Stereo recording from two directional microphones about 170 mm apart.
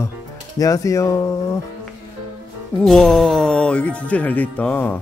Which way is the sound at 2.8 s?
Centre (ahead or behind).